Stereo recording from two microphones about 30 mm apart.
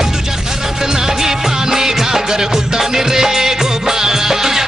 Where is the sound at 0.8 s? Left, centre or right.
Centre.